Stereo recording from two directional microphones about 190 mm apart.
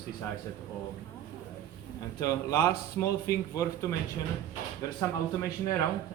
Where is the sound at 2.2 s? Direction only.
15° left (ahead or behind).